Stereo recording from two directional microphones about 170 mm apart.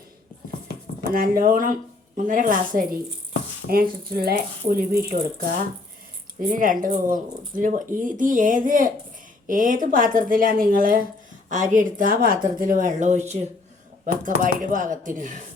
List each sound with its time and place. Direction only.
1.1 s a woman's voice: 60° right (ahead or behind)